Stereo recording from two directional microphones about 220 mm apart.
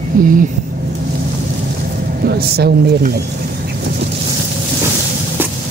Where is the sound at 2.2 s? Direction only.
45° right (ahead or behind).